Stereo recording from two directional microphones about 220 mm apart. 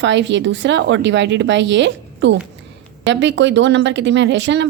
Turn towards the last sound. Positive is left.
turn(degrees=-55)  # may be behind; listen again after turning